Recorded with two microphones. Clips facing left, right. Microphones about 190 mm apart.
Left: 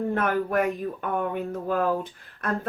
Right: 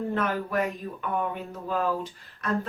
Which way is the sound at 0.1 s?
55° left (ahead or behind).